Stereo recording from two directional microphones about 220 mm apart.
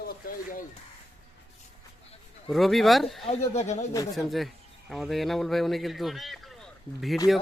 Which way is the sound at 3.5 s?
30° left (ahead or behind).